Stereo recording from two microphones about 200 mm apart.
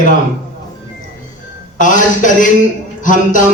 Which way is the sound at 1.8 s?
40° left (ahead or behind).